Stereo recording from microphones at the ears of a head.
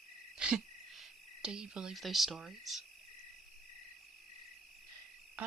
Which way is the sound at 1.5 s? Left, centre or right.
Right.